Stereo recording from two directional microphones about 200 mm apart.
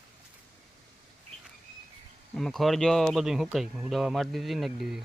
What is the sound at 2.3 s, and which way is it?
Speech, centre (ahead or behind).